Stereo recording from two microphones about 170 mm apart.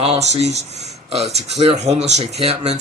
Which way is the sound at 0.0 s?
40° right (ahead or behind).